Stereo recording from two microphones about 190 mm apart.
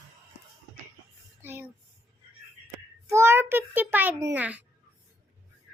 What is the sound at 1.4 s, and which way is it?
Speech, 10° right (ahead or behind).